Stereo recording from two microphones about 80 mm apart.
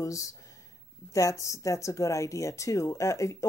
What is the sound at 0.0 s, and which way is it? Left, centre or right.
A woman's voice, left.